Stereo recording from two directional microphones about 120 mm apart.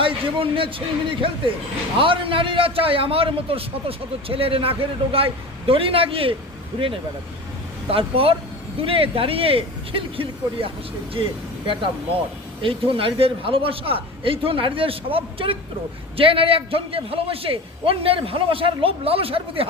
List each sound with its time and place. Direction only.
0.0 s a man's voice: 45° right (ahead or behind)